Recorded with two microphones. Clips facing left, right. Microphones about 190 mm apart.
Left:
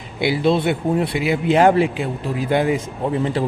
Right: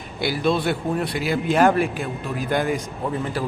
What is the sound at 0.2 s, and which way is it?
Speech, 20° left (ahead or behind).